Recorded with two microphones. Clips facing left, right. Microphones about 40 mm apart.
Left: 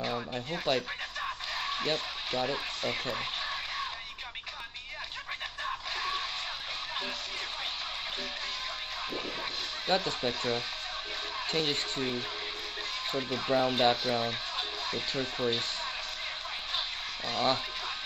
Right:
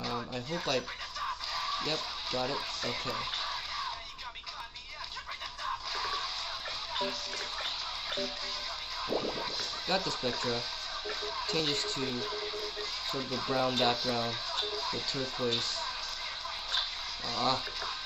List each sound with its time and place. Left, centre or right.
0.3 s speech: left
5.9 s music: left
9.8 s speech: left
17.3 s speech: left